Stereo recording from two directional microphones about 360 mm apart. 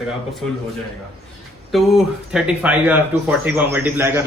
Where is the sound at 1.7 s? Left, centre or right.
Centre.